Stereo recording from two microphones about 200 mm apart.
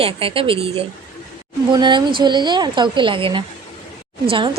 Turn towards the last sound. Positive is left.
turn(degrees=-25)  # may be behind; listen again after turning